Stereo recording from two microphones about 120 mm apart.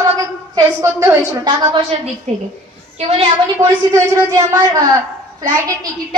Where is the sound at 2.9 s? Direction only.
55° right (ahead or behind).